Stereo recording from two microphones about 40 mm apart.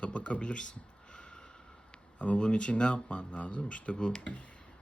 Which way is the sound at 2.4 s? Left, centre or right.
Left.